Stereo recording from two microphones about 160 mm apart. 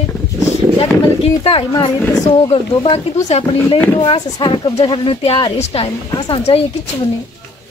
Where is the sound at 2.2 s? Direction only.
35° left (ahead or behind).